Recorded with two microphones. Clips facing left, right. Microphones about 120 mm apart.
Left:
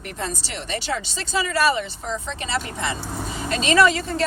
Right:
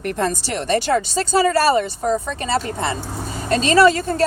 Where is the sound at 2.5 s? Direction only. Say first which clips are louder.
Right 5 dB; 35° right (ahead or behind).